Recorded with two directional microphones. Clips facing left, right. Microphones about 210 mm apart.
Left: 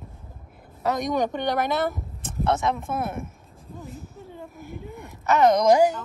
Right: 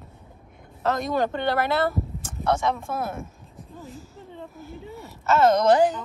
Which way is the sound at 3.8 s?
Centre (ahead or behind).